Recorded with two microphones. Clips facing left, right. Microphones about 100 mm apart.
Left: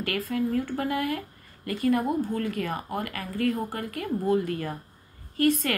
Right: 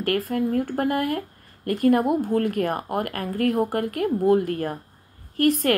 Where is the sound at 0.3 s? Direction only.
50° right (ahead or behind).